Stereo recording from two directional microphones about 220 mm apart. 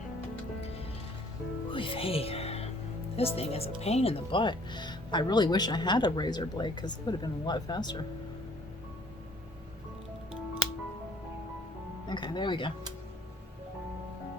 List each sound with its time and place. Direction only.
1.7 s speech: 25° left (ahead or behind)
12.0 s speech: 20° left (ahead or behind)